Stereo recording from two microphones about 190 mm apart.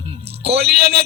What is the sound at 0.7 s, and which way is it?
Speech, 60° right (ahead or behind).